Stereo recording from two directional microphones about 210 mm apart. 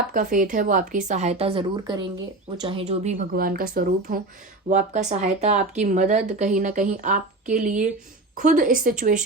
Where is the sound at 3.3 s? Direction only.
45° right (ahead or behind).